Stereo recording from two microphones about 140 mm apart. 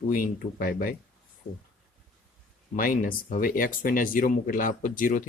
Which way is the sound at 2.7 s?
85° left.